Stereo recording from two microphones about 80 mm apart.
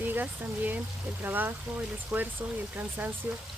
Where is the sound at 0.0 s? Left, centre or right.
Right.